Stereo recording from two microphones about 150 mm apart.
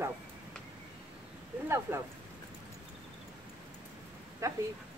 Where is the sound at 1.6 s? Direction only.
15° right (ahead or behind).